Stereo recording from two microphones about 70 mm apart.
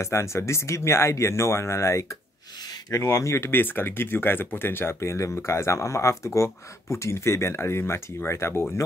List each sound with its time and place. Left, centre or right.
0.0 s speech: left
3.5 s speech: left